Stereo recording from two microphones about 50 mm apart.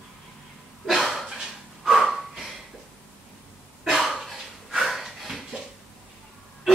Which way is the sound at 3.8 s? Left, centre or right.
Centre.